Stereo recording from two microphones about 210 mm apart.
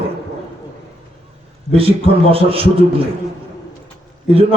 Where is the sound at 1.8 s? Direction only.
25° right (ahead or behind).